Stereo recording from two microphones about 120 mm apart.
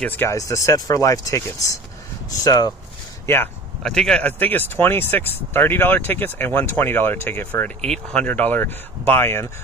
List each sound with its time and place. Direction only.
0.0 s speech: 15° left (ahead or behind)
0.3 s speech: 25° left (ahead or behind)
3.8 s speech: 5° left (ahead or behind); by 9.5 s 20° left (ahead or behind)